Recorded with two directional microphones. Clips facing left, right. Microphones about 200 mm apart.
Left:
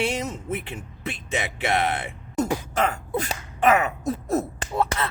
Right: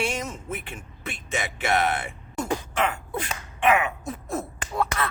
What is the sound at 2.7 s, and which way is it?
Sneeze, 40° left (ahead or behind).